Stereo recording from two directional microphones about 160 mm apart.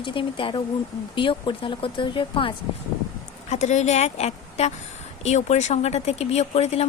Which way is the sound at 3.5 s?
45° left (ahead or behind).